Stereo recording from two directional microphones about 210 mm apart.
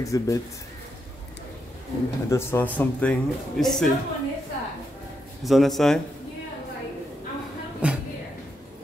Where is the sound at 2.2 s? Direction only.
10° left (ahead or behind).